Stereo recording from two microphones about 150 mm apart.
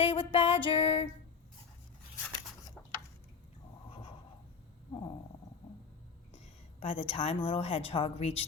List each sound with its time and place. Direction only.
0.0 s speech: 35° left (ahead or behind)
6.7 s a sound: 35° left (ahead or behind)
7.1 s speech: 40° left (ahead or behind)